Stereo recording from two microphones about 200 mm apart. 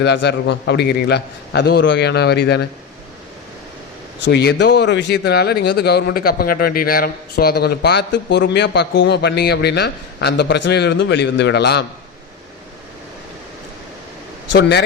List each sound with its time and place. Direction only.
0.0 s speech: 55° left (ahead or behind)
4.2 s speech: 60° left (ahead or behind)
14.5 s speech: 60° left (ahead or behind)